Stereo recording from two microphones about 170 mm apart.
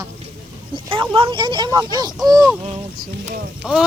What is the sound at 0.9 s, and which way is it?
Speech, 30° right (ahead or behind).